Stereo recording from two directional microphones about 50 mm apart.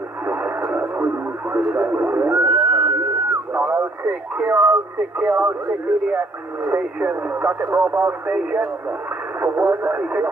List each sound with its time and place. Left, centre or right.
0.3 s radio: right
1.0 s speech: right
3.5 s radio: right
4.1 s speech: right
8.3 s speech: right
9.6 s speech: right